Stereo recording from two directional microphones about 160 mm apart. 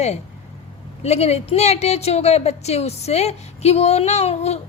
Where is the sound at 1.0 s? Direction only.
40° left (ahead or behind).